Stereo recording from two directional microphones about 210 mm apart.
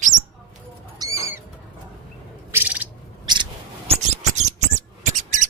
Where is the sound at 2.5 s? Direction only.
10° right (ahead or behind).